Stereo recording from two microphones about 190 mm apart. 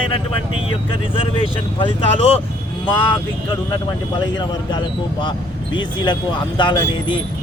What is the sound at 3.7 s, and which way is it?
Speech, 25° left (ahead or behind).